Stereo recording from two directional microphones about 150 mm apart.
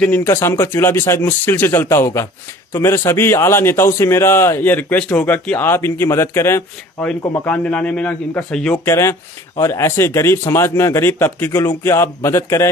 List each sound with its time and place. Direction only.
0.0 s a man's voice: 15° left (ahead or behind)
8.8 s a man's voice: 20° left (ahead or behind)